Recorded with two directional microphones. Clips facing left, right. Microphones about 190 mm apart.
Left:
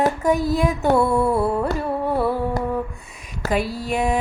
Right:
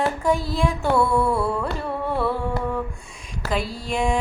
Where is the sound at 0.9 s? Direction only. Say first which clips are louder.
Left 2 dB; 20° left (ahead or behind).